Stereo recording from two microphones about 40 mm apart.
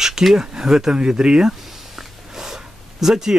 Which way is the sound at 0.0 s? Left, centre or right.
Centre.